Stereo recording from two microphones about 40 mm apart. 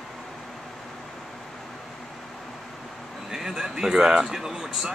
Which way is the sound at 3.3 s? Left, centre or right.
Centre.